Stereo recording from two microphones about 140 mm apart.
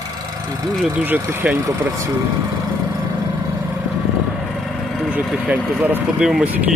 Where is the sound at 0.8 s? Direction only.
10° right (ahead or behind).